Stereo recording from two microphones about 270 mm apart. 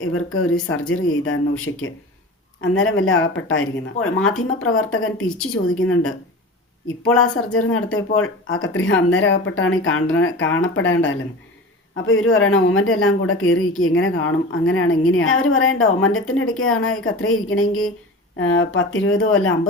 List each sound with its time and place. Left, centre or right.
0.0 s speech: left
7.5 s speech: left